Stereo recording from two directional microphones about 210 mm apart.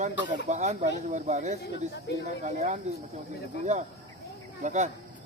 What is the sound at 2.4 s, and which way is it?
Speech, 35° right (ahead or behind).